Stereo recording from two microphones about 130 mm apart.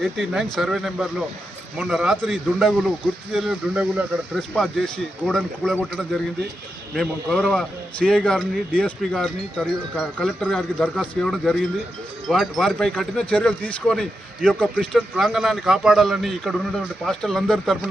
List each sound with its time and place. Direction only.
0.0 s a man's voice: centre (ahead or behind)
4.4 s a man's voice: 5° left (ahead or behind)
6.9 s a man's voice: 5° left (ahead or behind)
15.1 s a man's voice: 5° right (ahead or behind)